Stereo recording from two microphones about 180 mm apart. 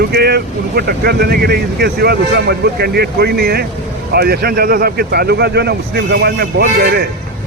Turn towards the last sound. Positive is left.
turn(degrees=-60)  # may be behind; listen again after turning